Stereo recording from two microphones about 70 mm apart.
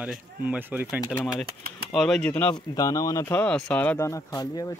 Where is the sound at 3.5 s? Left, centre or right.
Centre.